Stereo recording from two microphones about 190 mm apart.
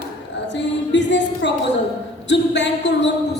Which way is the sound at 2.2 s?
70° left (ahead or behind).